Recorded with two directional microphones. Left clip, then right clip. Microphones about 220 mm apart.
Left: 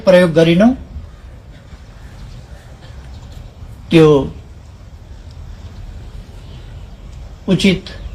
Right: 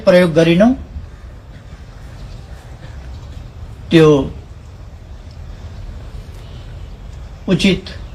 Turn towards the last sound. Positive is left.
turn(degrees=45)  # may be behind; listen again after turning